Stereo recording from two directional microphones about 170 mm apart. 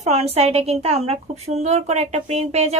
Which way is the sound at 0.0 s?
40° right (ahead or behind).